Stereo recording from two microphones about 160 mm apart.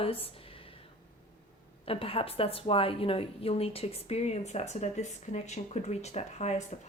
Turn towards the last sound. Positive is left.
turn(degrees=45)  # may be behind; listen again after turning